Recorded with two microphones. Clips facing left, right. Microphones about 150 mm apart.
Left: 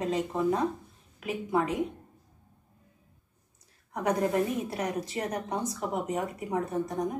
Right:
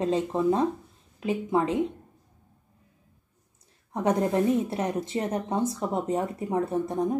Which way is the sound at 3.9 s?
25° right (ahead or behind).